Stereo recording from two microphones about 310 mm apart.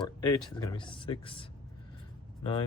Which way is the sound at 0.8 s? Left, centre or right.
Centre.